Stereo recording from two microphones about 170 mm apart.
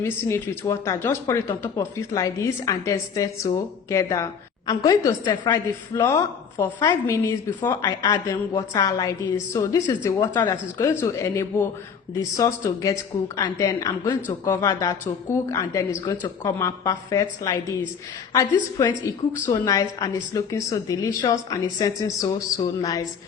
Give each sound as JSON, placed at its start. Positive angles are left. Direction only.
{"t": 0.0, "sound": "speech", "side_deg": 15}
{"t": 18.8, "sound": "speech", "side_deg": 20}